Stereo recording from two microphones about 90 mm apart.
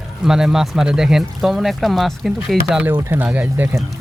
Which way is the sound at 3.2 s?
20° right (ahead or behind).